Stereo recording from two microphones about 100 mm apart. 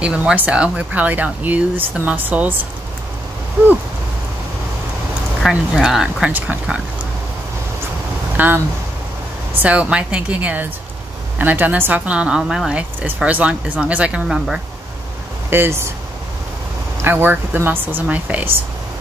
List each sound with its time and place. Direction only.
0.0 s speech: 10° right (ahead or behind)
5.5 s speech: 5° right (ahead or behind)
8.4 s speech: 20° right (ahead or behind)
15.5 s speech: 25° right (ahead or behind)
17.0 s speech: 20° right (ahead or behind)